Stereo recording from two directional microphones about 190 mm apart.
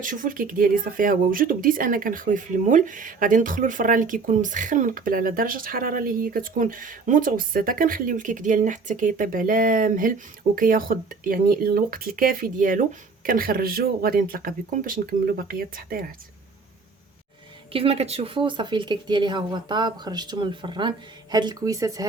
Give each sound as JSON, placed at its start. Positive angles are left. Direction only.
{"t": 0.0, "sound": "speech", "side_deg": -45}
{"t": 17.7, "sound": "speech", "side_deg": -30}